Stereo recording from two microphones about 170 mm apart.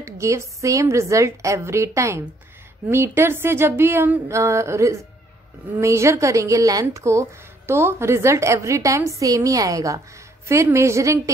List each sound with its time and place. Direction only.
0.0 s a woman's voice: 15° right (ahead or behind)